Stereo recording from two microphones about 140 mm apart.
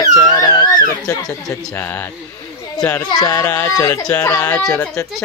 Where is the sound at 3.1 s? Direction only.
25° left (ahead or behind).